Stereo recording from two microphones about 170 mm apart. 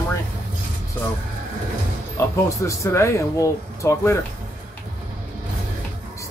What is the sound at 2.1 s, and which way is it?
Speech, 15° left (ahead or behind).